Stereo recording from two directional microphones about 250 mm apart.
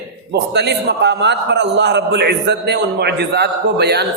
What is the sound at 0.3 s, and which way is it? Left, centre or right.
A man's voice, right.